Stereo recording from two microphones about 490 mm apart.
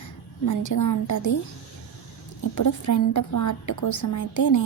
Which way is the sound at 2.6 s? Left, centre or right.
Left.